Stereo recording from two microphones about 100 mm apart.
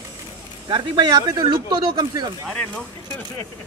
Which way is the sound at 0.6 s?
50° right (ahead or behind).